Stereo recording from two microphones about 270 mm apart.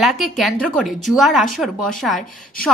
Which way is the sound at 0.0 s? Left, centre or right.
Centre.